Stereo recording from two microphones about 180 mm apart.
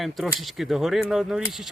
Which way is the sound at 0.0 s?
Centre (ahead or behind).